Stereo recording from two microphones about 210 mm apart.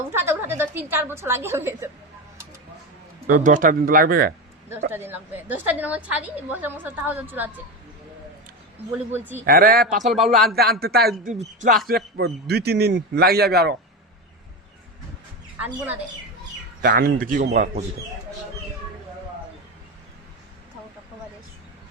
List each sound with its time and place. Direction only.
0.1 s a woman's voice: 10° right (ahead or behind)
3.2 s a man's voice: 40° right (ahead or behind)
4.9 s a woman's voice: 10° right (ahead or behind)
9.1 s a woman's voice: 10° right (ahead or behind)
9.5 s a man's voice: 45° right (ahead or behind)
10.1 s speech: centre (ahead or behind)
10.5 s a man's voice: 50° right (ahead or behind)
11.3 s speech: 35° right (ahead or behind)
11.9 s a man's voice: 50° right (ahead or behind)
15.6 s a woman's voice: 10° right (ahead or behind)
16.8 s a man's voice: 45° right (ahead or behind)